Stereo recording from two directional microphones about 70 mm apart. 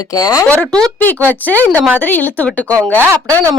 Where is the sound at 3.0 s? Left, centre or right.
Right.